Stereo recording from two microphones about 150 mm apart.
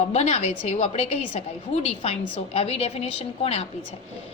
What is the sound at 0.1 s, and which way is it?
A woman's voice, 50° left (ahead or behind).